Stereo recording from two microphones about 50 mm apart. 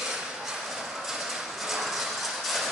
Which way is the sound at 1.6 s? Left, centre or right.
Centre.